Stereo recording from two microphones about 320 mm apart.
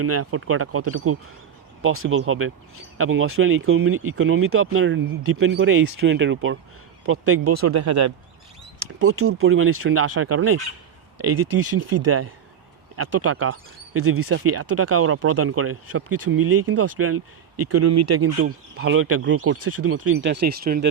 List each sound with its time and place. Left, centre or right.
0.0 s speech: right
7.4 s speech: right
9.0 s speech: right
11.6 s speech: right
16.3 s speech: right
16.6 s speech: right
18.4 s speech: right
20.2 s speech: right